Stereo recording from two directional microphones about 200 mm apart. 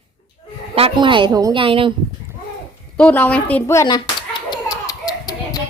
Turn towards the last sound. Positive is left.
turn(degrees=20)  # may be behind; listen again after turning